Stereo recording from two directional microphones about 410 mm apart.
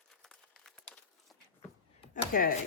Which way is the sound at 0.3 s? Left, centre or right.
Centre.